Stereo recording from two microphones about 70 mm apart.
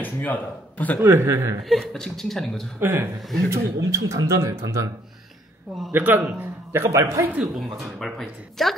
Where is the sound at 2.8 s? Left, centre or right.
Right.